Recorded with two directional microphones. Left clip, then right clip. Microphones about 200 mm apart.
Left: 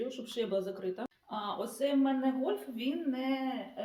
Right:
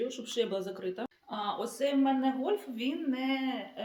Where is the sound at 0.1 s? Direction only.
25° right (ahead or behind).